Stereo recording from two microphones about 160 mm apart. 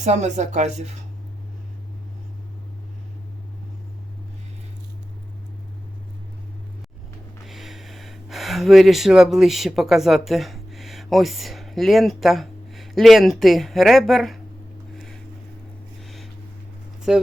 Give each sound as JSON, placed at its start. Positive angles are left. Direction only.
{"t": 0.0, "sound": "speech", "side_deg": -45}
{"t": 7.4, "sound": "speech", "side_deg": 0}
{"t": 14.9, "sound": "a sound", "side_deg": 5}
{"t": 17.1, "sound": "speech", "side_deg": -5}